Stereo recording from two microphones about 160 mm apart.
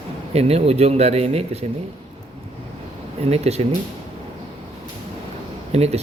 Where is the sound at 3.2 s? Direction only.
40° right (ahead or behind).